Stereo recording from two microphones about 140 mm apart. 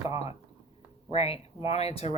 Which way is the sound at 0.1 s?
25° right (ahead or behind).